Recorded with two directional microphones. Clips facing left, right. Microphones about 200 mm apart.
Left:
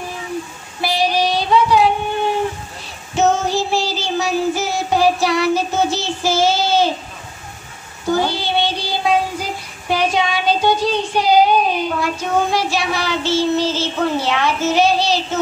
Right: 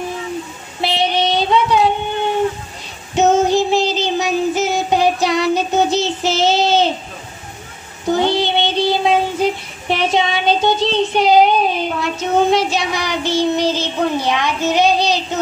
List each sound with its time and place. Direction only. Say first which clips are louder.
0.7 s child singing: even; 25° right (ahead or behind)
3.2 s child singing: right 4 dB; 20° right (ahead or behind)
8.0 s child singing: right 3 dB; 20° right (ahead or behind)